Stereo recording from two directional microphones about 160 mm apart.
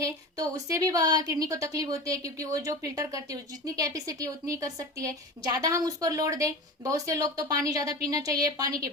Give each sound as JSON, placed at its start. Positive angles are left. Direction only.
{"t": 0.0, "sound": "a woman's voice", "side_deg": -20}